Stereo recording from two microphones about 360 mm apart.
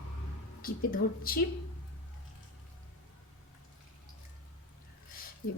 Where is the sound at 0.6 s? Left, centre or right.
Left.